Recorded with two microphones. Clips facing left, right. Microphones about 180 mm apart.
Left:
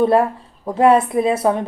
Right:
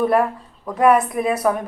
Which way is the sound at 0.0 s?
25° left (ahead or behind).